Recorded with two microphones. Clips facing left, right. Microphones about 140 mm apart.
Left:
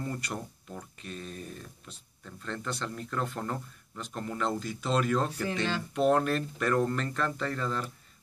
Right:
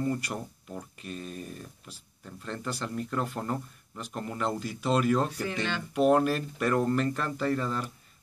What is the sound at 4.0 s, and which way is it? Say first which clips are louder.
A man's voice: even; 5° right (ahead or behind).